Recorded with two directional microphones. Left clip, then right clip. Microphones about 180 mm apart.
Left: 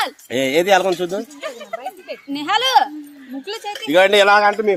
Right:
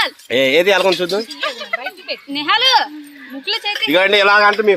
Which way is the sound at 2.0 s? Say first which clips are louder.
Right 5 dB; 55° left (ahead or behind).